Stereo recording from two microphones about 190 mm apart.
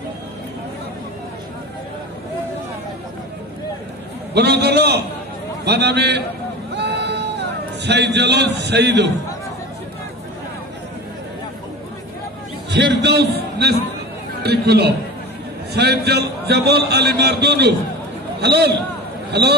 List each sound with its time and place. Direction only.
4.3 s a man's voice: 60° right (ahead or behind)
6.7 s a sound: 65° right (ahead or behind)
12.7 s a man's voice: 65° right (ahead or behind)